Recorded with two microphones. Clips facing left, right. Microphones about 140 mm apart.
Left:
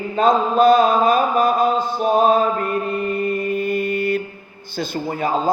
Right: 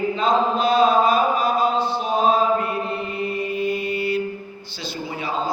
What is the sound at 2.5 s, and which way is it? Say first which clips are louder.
Mantra: left 2 dB; 50° left (ahead or behind).